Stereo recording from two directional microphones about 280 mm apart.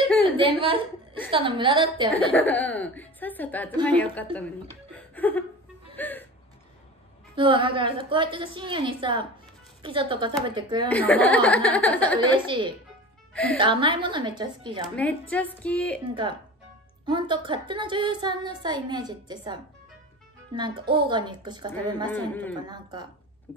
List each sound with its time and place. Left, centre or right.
0.2 s a woman's voice: centre
2.1 s a woman's voice: centre
4.9 s laughter: centre
5.9 s a sound: centre
7.3 s a woman's voice: centre
10.9 s a woman's voice: centre
12.4 s a woman's voice: centre
15.0 s a woman's voice: centre
17.0 s a woman's voice: centre
22.0 s a man's voice: centre
22.7 s a woman's voice: centre